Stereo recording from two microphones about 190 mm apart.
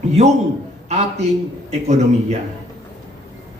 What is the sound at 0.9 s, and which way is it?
Speech, 35° right (ahead or behind).